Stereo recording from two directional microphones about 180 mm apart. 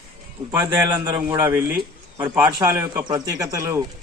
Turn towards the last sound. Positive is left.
turn(degrees=-15)  # may be behind; listen again after turning